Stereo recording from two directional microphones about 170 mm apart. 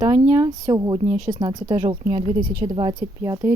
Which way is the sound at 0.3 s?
20° right (ahead or behind).